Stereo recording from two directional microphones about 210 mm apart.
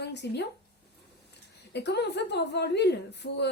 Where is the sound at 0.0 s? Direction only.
55° left (ahead or behind).